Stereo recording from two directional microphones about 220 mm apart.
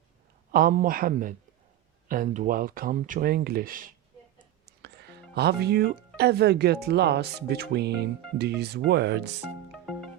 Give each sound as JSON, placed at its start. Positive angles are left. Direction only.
{"t": 0.5, "sound": "speech", "side_deg": -40}
{"t": 4.6, "sound": "music", "side_deg": -50}
{"t": 6.1, "sound": "speech", "side_deg": -45}
{"t": 9.7, "sound": "music", "side_deg": 0}